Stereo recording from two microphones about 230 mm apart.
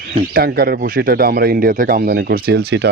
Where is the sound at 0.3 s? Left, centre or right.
Right.